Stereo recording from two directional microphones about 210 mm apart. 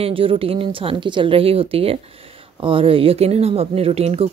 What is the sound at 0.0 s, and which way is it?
Speech, 25° right (ahead or behind).